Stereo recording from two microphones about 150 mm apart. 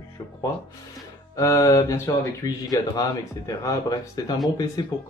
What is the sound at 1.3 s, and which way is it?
Speech, 20° left (ahead or behind).